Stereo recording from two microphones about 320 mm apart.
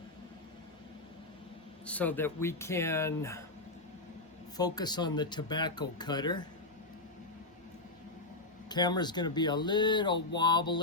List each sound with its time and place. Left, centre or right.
1.9 s speech: centre
4.5 s speech: centre
8.7 s speech: centre